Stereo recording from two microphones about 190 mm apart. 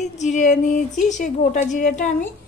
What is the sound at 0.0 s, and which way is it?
A woman's voice, 40° left (ahead or behind).